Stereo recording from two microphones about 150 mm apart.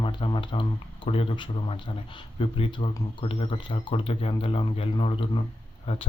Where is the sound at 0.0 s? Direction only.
35° left (ahead or behind).